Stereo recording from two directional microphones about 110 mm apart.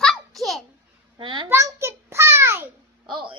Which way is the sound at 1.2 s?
50° right (ahead or behind).